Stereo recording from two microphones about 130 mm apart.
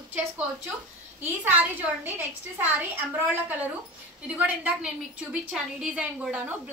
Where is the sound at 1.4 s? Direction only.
15° right (ahead or behind).